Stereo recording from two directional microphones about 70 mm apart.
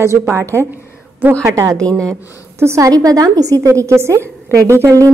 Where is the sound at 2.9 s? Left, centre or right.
Right.